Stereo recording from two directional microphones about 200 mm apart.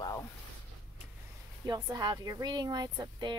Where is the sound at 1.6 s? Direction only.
20° right (ahead or behind).